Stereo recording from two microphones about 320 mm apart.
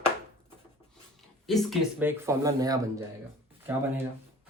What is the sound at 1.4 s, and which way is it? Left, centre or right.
Speech, centre.